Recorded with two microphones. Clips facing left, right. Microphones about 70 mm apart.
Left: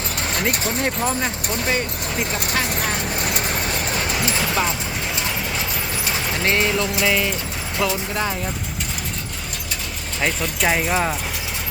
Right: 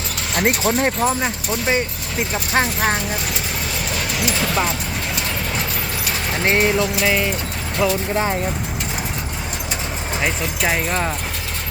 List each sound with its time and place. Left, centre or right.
0.3 s speech: right
1.0 s speech: centre
2.5 s speech: right
4.1 s speech: left
6.3 s speech: right
7.0 s speech: centre
7.8 s speech: right
8.1 s speech: right
10.2 s speech: centre